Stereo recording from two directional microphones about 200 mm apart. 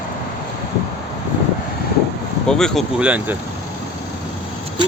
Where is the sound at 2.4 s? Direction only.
Centre (ahead or behind).